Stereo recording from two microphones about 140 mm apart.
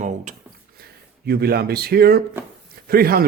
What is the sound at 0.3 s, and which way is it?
Speech, 60° right (ahead or behind).